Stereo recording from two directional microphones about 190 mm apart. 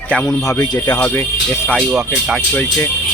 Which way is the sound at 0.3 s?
15° left (ahead or behind).